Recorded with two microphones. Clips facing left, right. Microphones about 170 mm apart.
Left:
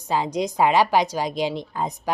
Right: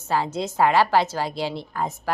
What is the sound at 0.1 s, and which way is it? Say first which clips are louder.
A woman's voice: left 1 dB; 15° left (ahead or behind).